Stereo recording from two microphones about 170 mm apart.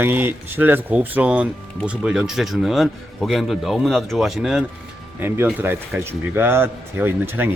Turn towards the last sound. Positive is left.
turn(degrees=-10)  # may be behind; listen again after turning